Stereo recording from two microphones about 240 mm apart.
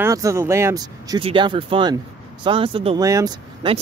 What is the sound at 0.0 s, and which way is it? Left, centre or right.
Speech, centre.